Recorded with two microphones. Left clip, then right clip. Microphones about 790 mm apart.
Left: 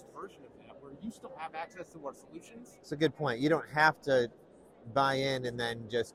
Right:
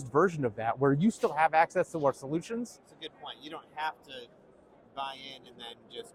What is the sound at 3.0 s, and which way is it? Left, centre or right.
Speech, left.